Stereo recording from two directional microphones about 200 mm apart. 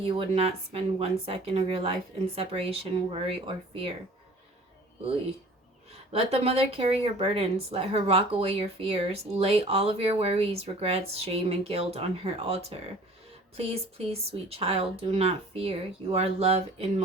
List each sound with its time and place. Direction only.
0.0 s speech: 30° right (ahead or behind)
6.1 s speech: 30° right (ahead or behind)